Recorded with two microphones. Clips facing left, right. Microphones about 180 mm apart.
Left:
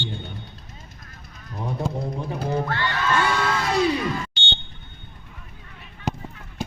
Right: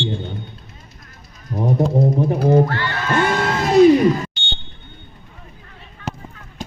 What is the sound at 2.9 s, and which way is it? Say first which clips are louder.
Crowd: right 4 dB; 40° right (ahead or behind).